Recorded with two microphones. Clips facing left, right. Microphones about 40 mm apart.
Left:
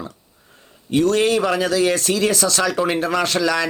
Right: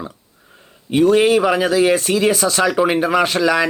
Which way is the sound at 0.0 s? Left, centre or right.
Centre.